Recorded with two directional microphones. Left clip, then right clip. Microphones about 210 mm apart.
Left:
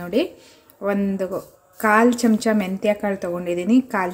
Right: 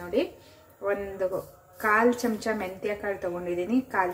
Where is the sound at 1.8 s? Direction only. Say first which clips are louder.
Left 6 dB; 50° left (ahead or behind).